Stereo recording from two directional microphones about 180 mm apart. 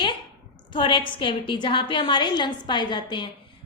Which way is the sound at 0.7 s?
25° left (ahead or behind).